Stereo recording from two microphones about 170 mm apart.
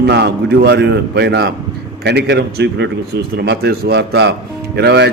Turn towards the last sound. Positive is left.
turn(degrees=-80)